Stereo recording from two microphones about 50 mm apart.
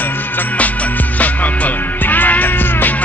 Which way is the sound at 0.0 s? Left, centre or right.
Left.